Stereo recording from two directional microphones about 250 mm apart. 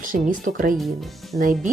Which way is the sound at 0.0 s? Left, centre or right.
Right.